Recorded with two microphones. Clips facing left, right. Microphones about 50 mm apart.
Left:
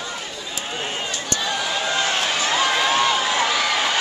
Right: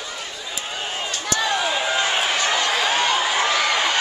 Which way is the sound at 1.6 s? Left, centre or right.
Centre.